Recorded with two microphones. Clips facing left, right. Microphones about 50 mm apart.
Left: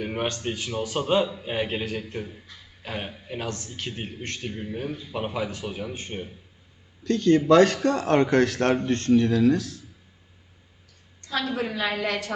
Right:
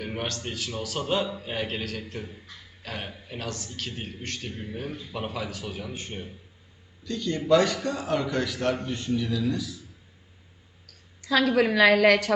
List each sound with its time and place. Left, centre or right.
0.0 s a man's voice: centre
7.0 s a man's voice: left
11.2 s a woman's voice: right